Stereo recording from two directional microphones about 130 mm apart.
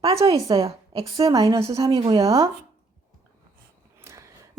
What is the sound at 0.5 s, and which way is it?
Speech, 45° right (ahead or behind).